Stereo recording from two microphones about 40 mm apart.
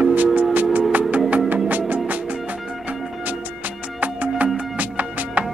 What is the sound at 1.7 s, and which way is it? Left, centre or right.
Music, right.